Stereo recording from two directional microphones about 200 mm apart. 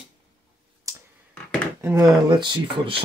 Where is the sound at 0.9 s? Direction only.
15° right (ahead or behind).